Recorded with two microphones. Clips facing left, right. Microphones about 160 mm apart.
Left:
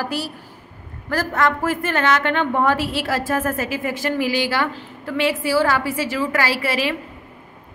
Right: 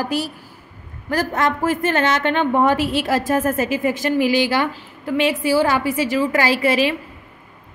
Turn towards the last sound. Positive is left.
turn(degrees=-20)  # may be behind; listen again after turning